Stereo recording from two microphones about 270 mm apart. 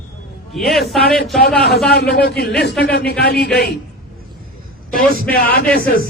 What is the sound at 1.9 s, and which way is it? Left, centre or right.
Speech, left.